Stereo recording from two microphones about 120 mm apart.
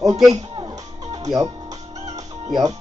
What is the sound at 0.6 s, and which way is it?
Music, 35° right (ahead or behind).